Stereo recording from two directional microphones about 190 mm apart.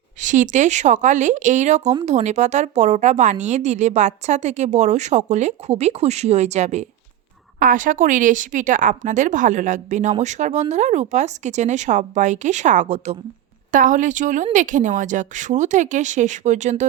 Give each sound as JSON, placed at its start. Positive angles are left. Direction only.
{"t": 0.2, "sound": "a woman's voice", "side_deg": -40}